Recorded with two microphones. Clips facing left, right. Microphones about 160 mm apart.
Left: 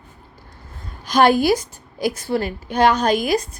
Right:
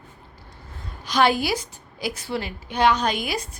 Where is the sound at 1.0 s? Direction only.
45° left (ahead or behind).